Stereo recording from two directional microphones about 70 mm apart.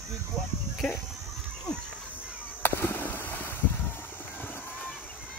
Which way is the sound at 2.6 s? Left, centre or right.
Left.